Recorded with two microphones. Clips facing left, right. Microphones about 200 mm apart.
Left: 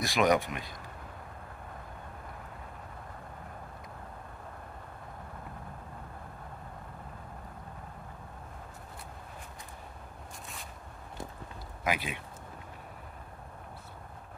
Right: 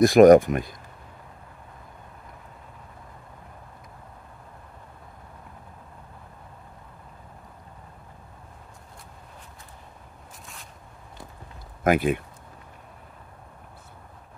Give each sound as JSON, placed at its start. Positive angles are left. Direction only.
{"t": 0.0, "sound": "speech", "side_deg": -45}
{"t": 11.8, "sound": "speech", "side_deg": -50}